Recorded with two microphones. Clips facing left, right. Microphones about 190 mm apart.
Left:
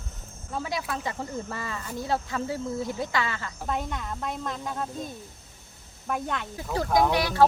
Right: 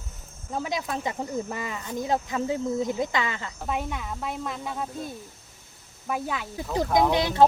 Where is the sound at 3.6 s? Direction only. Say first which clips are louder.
Right 1 dB; 5° right (ahead or behind).